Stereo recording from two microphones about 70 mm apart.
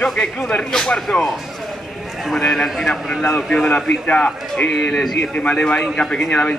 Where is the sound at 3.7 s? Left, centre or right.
Centre.